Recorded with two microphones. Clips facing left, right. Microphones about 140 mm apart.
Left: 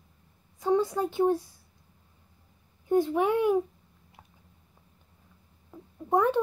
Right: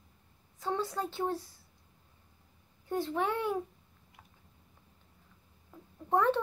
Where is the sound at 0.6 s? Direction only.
15° left (ahead or behind).